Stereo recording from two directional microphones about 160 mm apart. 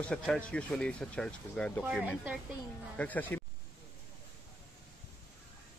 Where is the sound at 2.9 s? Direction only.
10° left (ahead or behind).